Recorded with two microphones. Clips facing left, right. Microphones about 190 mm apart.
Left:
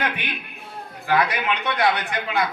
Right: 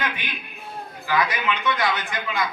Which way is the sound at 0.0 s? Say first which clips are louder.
Left 3 dB; 60° left (ahead or behind).